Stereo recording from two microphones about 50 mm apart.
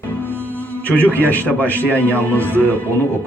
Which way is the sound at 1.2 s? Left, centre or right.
Left.